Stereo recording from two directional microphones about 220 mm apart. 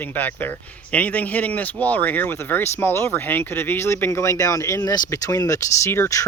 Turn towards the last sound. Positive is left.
turn(degrees=15)  # may be behind; listen again after turning